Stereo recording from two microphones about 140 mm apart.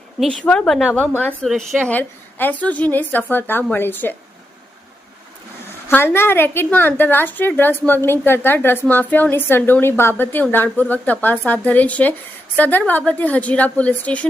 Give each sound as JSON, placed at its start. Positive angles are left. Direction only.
{"t": 0.2, "sound": "a woman's voice", "side_deg": 5}
{"t": 5.9, "sound": "a woman's voice", "side_deg": 15}